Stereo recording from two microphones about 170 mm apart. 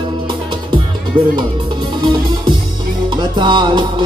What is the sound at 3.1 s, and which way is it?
Music, 30° right (ahead or behind).